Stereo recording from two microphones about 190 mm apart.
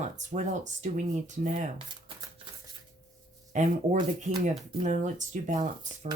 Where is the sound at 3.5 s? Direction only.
40° right (ahead or behind).